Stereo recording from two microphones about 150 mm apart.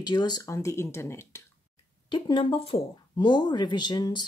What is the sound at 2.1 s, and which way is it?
Speech, 35° left (ahead or behind).